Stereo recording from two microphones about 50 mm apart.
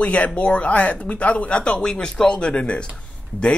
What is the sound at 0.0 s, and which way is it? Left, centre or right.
Speech, left.